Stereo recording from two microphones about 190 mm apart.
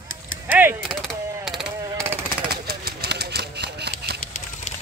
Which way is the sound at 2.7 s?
60° right (ahead or behind).